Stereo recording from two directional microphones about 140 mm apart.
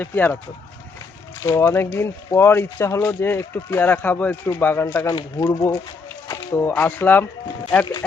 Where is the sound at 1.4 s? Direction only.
20° left (ahead or behind).